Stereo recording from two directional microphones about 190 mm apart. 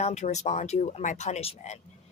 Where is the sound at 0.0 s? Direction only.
35° left (ahead or behind).